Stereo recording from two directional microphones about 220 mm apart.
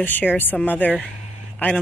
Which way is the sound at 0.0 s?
10° left (ahead or behind).